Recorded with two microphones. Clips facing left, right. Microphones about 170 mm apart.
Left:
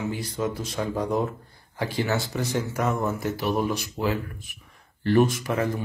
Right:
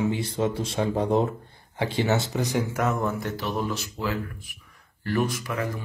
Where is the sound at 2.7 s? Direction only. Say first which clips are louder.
Even; centre (ahead or behind); by 5.8 s 25° left (ahead or behind).